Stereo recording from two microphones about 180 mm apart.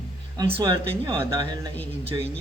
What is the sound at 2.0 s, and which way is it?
Speech, 30° right (ahead or behind).